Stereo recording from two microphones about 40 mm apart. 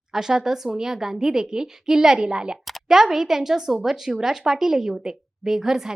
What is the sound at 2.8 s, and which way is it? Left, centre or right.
A woman's voice, centre.